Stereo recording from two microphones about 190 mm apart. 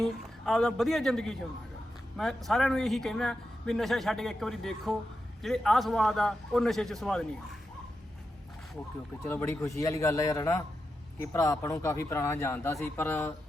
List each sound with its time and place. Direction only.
0.0 s a man's voice: centre (ahead or behind)
9.2 s speech: 10° left (ahead or behind)